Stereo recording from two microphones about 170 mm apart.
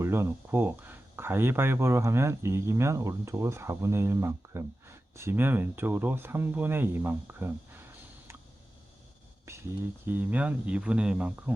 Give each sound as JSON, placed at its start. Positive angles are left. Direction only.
{"t": 0.0, "sound": "speech", "side_deg": -15}
{"t": 9.5, "sound": "speech", "side_deg": -15}